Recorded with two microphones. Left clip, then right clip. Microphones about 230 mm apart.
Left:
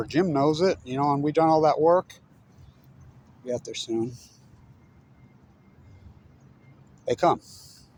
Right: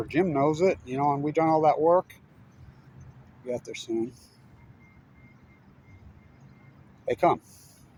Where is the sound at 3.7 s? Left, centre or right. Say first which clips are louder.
Left 2 dB; left.